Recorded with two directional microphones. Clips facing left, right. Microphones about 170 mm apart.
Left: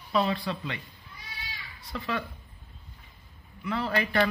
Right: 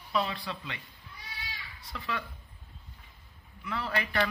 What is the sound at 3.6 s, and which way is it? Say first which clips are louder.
Speech: left 5 dB; 30° left (ahead or behind).